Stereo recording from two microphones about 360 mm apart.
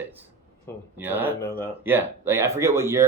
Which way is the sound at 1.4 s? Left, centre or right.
Centre.